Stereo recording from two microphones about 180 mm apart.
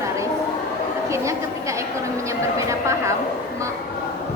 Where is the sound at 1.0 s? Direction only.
15° right (ahead or behind).